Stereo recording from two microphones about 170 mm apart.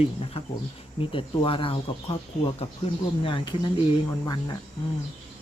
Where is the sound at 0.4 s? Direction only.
35° left (ahead or behind).